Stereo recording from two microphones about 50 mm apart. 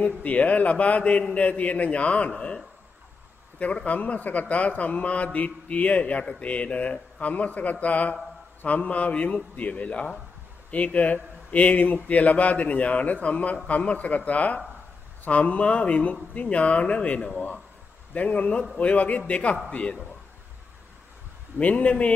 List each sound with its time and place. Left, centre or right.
0.0 s a man's voice: left
21.5 s a man's voice: left